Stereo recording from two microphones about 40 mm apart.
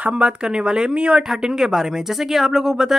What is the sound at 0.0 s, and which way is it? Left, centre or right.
Speech, right.